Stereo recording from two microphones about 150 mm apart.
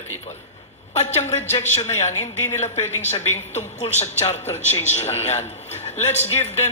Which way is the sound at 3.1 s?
50° left (ahead or behind).